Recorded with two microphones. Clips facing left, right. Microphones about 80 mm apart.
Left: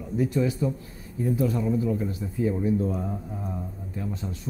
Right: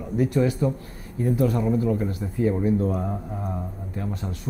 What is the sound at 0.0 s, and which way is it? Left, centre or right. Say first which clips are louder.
A man's voice: right 3 dB; right.